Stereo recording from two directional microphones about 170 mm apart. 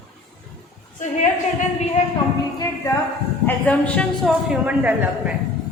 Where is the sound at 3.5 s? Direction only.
5° left (ahead or behind).